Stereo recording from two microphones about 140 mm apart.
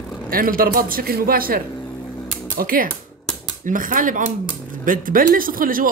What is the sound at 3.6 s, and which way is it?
A man's voice, 70° right (ahead or behind).